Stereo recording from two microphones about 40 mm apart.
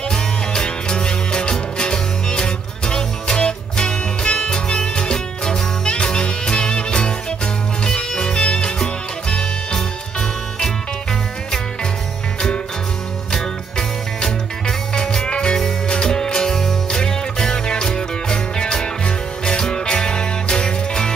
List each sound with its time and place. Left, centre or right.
0.1 s music: centre
13.3 s music: centre